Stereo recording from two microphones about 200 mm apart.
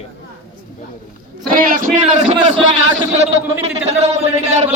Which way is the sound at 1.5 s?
45° right (ahead or behind).